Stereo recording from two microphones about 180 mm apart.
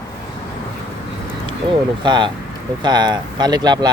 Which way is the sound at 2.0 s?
25° right (ahead or behind).